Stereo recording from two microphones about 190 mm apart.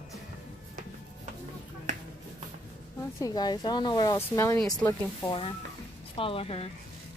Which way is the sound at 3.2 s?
20° left (ahead or behind).